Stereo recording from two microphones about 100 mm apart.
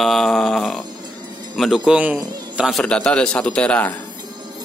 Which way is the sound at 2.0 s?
10° right (ahead or behind).